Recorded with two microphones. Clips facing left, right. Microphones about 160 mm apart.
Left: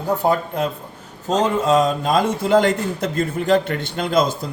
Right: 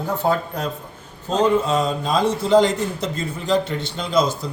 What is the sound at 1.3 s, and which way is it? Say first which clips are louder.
A man's voice: left 1 dB; 40° left (ahead or behind).